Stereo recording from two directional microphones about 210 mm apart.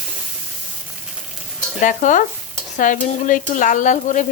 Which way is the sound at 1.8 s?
35° left (ahead or behind).